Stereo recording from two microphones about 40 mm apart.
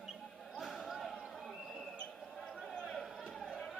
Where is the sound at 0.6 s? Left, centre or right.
Centre.